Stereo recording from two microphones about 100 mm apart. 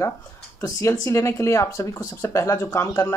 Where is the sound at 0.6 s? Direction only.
35° left (ahead or behind).